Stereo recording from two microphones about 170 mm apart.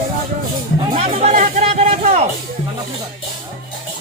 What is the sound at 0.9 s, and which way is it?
Music, 40° right (ahead or behind).